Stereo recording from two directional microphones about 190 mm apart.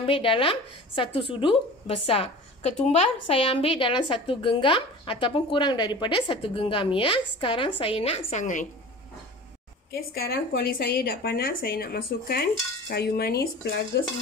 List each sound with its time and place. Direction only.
0.0 s a woman's voice: 30° left (ahead or behind)
10.1 s speech: 55° left (ahead or behind)
12.9 s cutlery: 55° left (ahead or behind)